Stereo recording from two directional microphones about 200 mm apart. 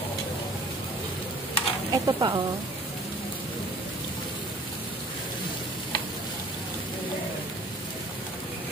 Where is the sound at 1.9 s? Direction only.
20° right (ahead or behind).